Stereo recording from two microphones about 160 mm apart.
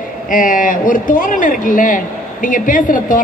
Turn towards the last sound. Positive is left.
turn(degrees=55)  # may be behind; listen again after turning